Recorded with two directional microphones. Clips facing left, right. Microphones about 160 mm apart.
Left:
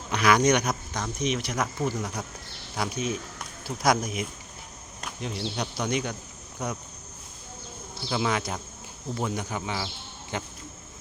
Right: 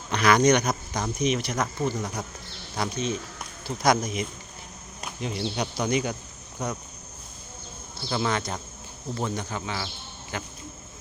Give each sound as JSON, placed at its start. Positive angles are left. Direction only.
{"t": 0.1, "sound": "speech", "side_deg": 5}
{"t": 8.1, "sound": "speech", "side_deg": 5}